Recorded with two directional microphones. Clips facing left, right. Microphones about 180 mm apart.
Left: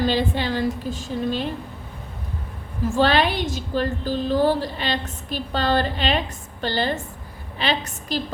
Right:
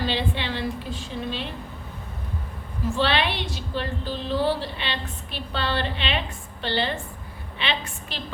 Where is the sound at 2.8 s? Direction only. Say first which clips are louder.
Left 5 dB; 45° left (ahead or behind).